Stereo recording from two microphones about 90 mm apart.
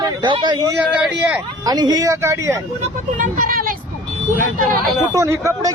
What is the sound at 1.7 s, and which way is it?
Speech, 45° right (ahead or behind).